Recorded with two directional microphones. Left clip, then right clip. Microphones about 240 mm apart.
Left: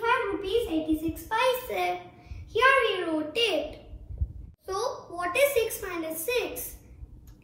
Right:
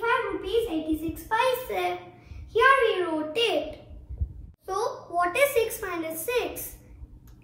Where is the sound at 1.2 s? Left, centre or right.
Centre.